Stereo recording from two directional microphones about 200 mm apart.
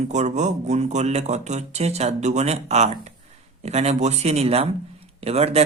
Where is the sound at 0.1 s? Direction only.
35° right (ahead or behind).